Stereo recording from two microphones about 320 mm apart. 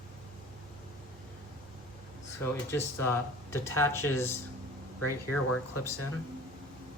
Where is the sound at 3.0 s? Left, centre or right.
Centre.